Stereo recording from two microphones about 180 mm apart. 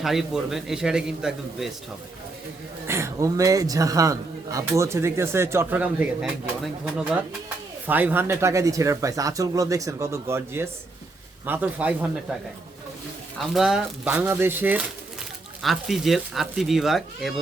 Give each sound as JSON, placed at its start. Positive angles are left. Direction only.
{"t": 0.0, "sound": "speech", "side_deg": 0}
{"t": 2.8, "sound": "a man's voice", "side_deg": -15}
{"t": 13.4, "sound": "a man's voice", "side_deg": 0}